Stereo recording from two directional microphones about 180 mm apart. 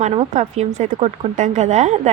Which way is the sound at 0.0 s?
40° right (ahead or behind).